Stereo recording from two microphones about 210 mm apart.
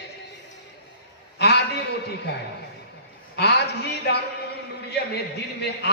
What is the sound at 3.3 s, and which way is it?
Speech, 50° left (ahead or behind).